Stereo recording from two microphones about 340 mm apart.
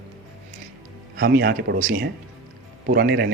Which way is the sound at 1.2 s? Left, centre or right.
Right.